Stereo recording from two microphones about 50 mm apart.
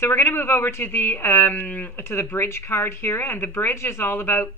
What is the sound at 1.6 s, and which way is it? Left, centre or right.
Speech, left.